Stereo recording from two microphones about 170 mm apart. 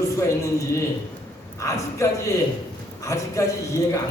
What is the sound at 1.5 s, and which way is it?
A man's voice, 15° left (ahead or behind).